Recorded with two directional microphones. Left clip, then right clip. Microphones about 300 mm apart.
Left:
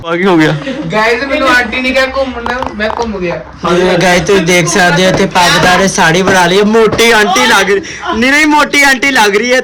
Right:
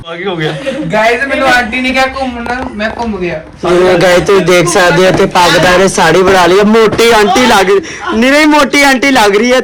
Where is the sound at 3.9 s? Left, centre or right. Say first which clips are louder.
Right 2 dB; centre.